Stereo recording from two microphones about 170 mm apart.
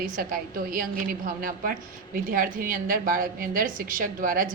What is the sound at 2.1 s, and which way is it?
A woman's voice, 55° right (ahead or behind).